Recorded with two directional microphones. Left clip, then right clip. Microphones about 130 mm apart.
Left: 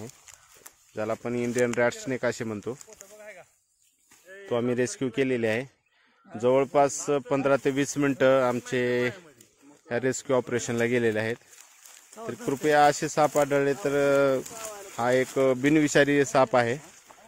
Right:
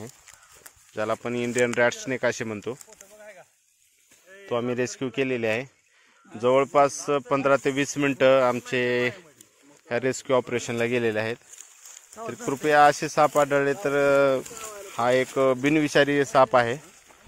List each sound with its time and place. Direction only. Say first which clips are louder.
0.9 s speech: right 2 dB; centre (ahead or behind)
1.9 s speech: right 3 dB; 15° left (ahead or behind)
3.2 s a sound: even; 20° right (ahead or behind)
4.5 s speech: even; 40° left (ahead or behind)
12.2 s speech: right 2 dB; 5° right (ahead or behind)
12.6 s speech: right 3 dB; 25° left (ahead or behind)